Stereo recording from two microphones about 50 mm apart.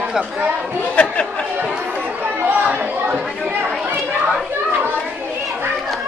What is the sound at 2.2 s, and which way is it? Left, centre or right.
Chatter, right.